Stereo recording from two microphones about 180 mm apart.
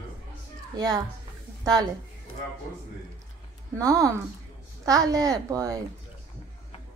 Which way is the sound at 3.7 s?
20° right (ahead or behind).